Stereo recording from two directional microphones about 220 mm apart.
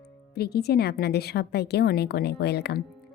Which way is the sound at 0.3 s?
45° left (ahead or behind).